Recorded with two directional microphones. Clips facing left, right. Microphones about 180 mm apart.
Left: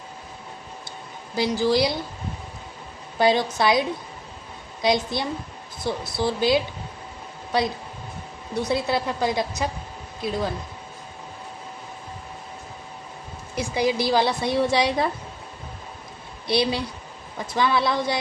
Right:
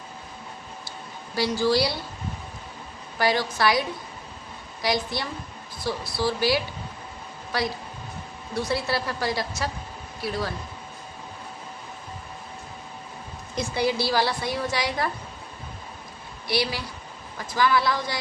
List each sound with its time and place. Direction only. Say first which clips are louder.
1.4 s a woman's voice: left 2 dB; 20° left (ahead or behind)
3.2 s a woman's voice: left 4 dB; 20° left (ahead or behind)
8.5 s a woman's voice: left 3 dB; 20° left (ahead or behind)
13.6 s a woman's voice: left 2 dB; 15° left (ahead or behind)
16.5 s a woman's voice: left 4 dB; 25° left (ahead or behind)